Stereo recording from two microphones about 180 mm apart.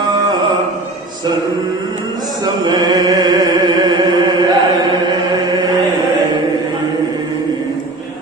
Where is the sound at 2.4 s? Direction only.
25° right (ahead or behind).